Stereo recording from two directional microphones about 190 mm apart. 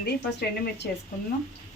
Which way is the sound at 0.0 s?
60° left (ahead or behind).